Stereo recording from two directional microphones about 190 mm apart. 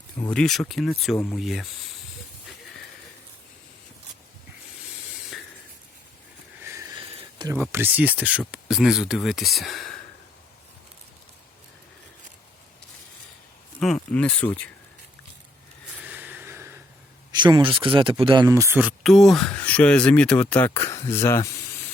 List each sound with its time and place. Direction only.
0.2 s speech: 5° left (ahead or behind)
6.6 s a sound: 15° right (ahead or behind)
7.5 s speech: 10° right (ahead or behind)
13.7 s speech: 5° left (ahead or behind)
16.0 s a sound: 10° right (ahead or behind)
17.3 s speech: 25° right (ahead or behind); by 21.6 s 15° left (ahead or behind)